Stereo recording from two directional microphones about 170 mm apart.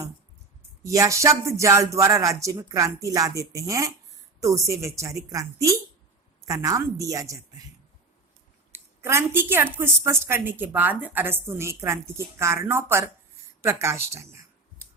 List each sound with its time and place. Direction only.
0.9 s speech: 20° right (ahead or behind)
8.7 s a woman's voice: 15° right (ahead or behind)